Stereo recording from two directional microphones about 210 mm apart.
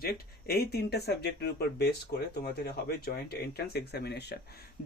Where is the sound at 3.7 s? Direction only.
50° left (ahead or behind).